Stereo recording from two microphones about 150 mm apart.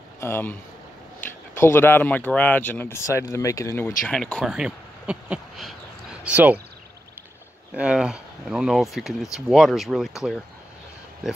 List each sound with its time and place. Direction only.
0.2 s speech: 15° left (ahead or behind)
1.6 s speech: 15° left (ahead or behind)
4.1 s speech: 5° left (ahead or behind)
4.5 s speech: 5° right (ahead or behind)
7.7 s speech: 5° right (ahead or behind)